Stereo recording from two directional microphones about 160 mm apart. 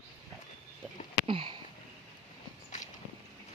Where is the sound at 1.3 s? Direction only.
30° right (ahead or behind).